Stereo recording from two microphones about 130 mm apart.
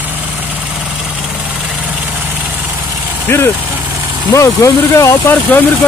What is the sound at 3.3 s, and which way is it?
Speech, 15° left (ahead or behind).